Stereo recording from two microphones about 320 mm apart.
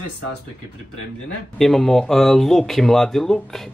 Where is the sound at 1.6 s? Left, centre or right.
Centre.